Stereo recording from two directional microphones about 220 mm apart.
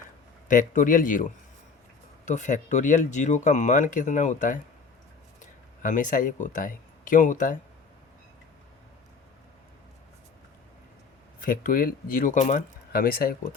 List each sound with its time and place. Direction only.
0.4 s speech: 35° left (ahead or behind)
11.3 s speech: 40° left (ahead or behind)